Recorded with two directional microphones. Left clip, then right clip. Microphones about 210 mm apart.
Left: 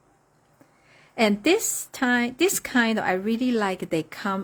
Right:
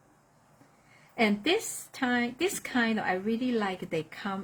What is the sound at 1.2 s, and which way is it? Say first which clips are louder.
Speech: left 6 dB; 55° left (ahead or behind).